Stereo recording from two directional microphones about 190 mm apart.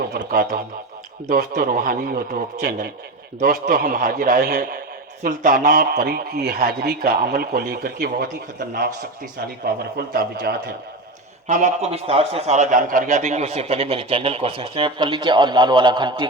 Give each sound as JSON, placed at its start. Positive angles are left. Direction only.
{"t": 0.1, "sound": "a man's voice", "side_deg": -50}
{"t": 11.4, "sound": "a man's voice", "side_deg": -40}